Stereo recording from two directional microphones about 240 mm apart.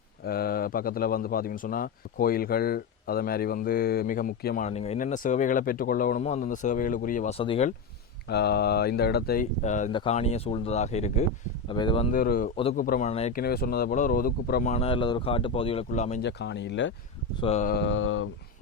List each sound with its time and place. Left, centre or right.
0.3 s a man's voice: left
8.3 s a man's voice: left; by 12.0 s centre
12.1 s a man's voice: left
13.4 s speech: left
16.2 s mantra: left
17.4 s mantra: left